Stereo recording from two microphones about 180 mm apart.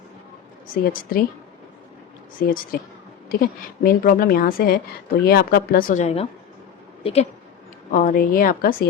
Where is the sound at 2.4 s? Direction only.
50° left (ahead or behind); by 7.3 s 35° left (ahead or behind).